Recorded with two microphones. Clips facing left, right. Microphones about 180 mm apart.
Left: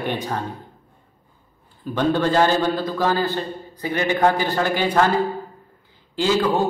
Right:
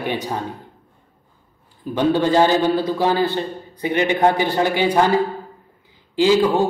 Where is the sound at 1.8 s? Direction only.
15° right (ahead or behind).